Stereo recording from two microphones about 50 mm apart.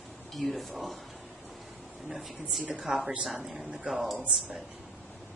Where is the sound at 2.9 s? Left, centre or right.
Centre.